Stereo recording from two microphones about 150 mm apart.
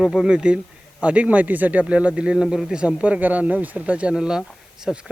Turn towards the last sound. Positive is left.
turn(degrees=-5)  # may be behind; listen again after turning